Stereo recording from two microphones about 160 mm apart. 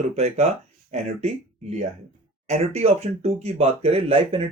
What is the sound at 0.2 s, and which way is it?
Speech, 45° right (ahead or behind).